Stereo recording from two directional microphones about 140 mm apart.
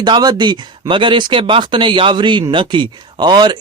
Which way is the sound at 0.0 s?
30° right (ahead or behind).